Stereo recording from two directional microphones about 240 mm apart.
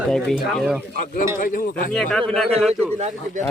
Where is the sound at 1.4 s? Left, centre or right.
Left.